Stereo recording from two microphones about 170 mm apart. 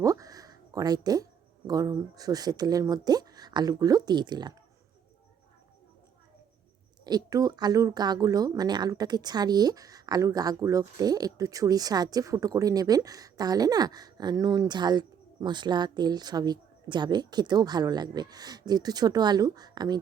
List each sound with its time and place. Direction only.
0.0 s speech: 20° right (ahead or behind)
7.0 s speech: 20° right (ahead or behind)